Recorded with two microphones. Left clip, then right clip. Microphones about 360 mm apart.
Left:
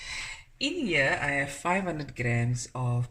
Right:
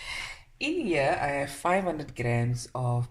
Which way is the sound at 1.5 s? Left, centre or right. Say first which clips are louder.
Right 2 dB; centre.